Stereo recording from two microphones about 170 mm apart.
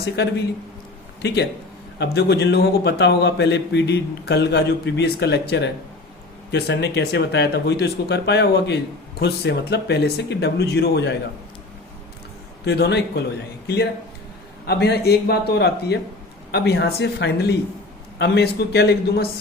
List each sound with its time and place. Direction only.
0.0 s speech: 85° left
2.0 s speech: 80° left
12.6 s a man's voice: 80° left
14.7 s a man's voice: 70° left (ahead or behind)